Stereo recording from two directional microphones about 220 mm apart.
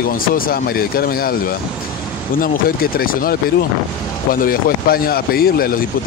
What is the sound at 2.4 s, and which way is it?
Speech, 40° left (ahead or behind).